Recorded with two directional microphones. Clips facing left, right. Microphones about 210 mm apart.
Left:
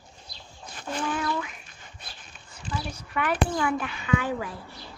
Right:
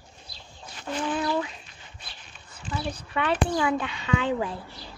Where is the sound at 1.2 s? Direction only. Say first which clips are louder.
Right 3 dB; 30° right (ahead or behind).